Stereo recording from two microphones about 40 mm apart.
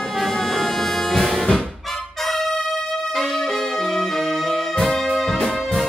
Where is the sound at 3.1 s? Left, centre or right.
Centre.